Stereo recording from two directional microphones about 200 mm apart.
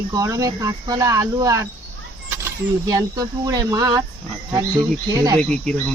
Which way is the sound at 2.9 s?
15° right (ahead or behind).